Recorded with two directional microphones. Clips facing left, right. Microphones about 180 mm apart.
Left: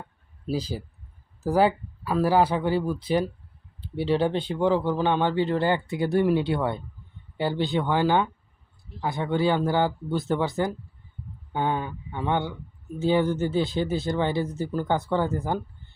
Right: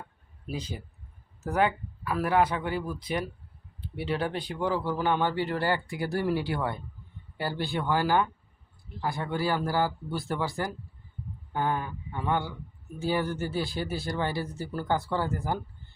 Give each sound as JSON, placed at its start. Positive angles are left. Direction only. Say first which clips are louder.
{"t": 0.4, "sound": "speech", "louder": "left 7 dB", "side_deg": 30}